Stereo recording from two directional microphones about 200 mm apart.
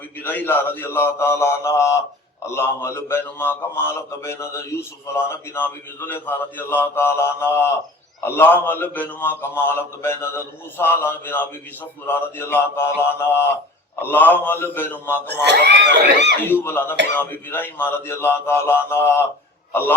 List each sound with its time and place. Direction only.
0.2 s a man's voice: 10° left (ahead or behind)
15.3 s speech: 55° right (ahead or behind)
16.4 s a man's voice: 10° left (ahead or behind)